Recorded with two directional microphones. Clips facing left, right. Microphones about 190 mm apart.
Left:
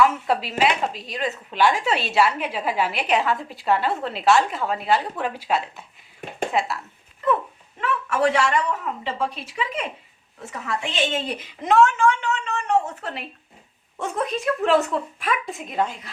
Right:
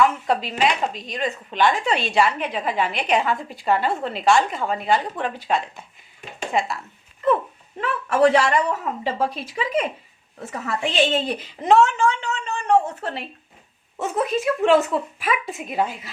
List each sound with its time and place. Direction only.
0.0 s a woman's voice: 5° left (ahead or behind)
7.8 s speech: 35° right (ahead or behind)
14.0 s a woman's voice: 5° right (ahead or behind)